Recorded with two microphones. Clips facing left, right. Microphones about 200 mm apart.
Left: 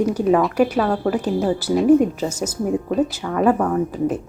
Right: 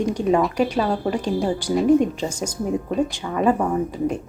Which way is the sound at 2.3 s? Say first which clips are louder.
Left 2 dB; 10° right (ahead or behind).